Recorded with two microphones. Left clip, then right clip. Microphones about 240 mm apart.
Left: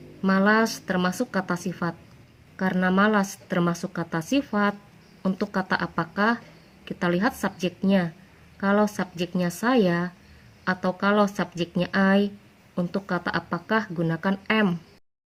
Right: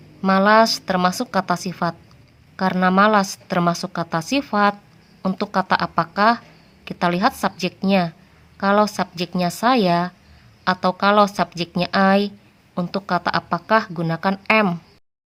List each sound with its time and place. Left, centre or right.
0.2 s speech: right